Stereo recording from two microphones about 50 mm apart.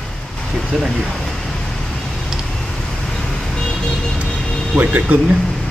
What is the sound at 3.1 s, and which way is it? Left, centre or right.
Vehicle, centre.